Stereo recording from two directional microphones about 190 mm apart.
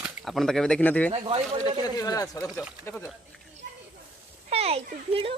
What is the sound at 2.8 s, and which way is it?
Speech, 5° left (ahead or behind).